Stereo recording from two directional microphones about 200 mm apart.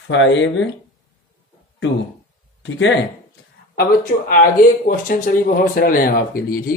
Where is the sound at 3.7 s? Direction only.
50° left (ahead or behind).